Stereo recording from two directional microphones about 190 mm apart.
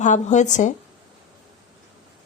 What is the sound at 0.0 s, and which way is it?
Speech, 40° left (ahead or behind).